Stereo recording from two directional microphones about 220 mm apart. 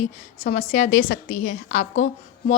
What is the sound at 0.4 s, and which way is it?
A woman's voice, 35° left (ahead or behind).